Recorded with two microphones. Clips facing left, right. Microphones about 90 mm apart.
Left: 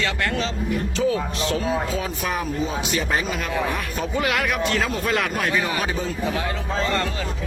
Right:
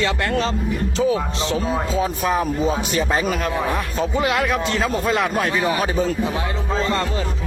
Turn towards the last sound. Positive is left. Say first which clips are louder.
# right 4 dB
turn(degrees=-35)  # may be behind; listen again after turning